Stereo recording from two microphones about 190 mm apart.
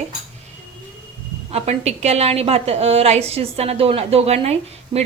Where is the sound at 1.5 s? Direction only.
35° right (ahead or behind).